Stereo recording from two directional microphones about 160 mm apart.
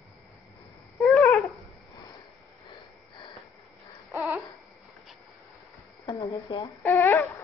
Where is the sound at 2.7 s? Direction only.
25° left (ahead or behind).